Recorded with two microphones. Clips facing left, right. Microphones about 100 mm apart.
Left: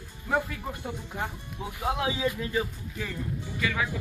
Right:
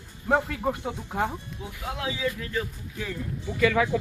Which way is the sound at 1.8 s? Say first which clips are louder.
Left 2 dB; 20° left (ahead or behind).